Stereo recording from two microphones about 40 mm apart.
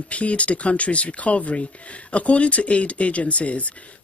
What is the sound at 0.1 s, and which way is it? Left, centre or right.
Speech, left.